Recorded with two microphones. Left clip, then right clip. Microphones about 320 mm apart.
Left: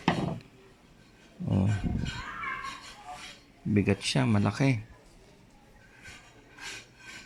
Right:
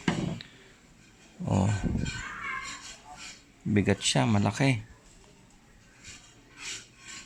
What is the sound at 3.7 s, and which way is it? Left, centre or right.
Speech, centre.